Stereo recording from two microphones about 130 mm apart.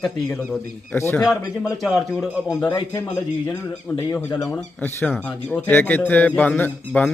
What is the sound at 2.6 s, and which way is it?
Speech, 25° left (ahead or behind).